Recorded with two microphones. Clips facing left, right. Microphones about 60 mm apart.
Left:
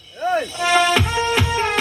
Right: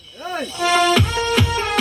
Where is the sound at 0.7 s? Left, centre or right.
Left.